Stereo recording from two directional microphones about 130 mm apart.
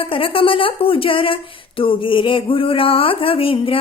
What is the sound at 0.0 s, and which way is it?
Speech, 45° left (ahead or behind).